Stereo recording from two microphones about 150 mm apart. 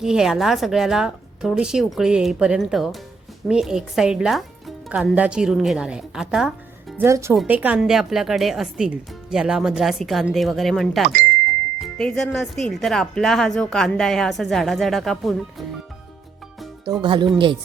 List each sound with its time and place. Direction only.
0.0 s speech: 5° right (ahead or behind)
7.0 s speech: 20° right (ahead or behind); by 15.6 s centre (ahead or behind)
16.8 s speech: 30° right (ahead or behind)